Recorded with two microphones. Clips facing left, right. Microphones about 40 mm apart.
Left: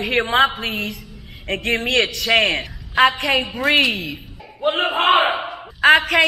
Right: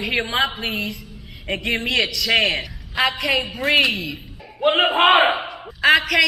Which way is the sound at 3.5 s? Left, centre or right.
Left.